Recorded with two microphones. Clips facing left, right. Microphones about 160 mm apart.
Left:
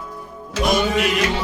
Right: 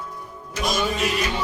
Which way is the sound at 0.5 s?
70° left (ahead or behind).